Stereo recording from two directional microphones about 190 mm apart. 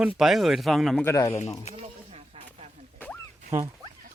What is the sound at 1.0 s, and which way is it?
Speech, 15° left (ahead or behind).